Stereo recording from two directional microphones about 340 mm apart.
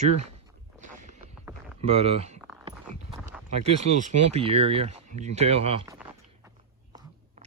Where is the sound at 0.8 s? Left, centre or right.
Right.